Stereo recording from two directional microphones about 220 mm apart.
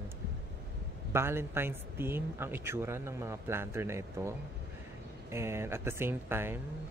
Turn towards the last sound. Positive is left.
turn(degrees=-10)  # may be behind; listen again after turning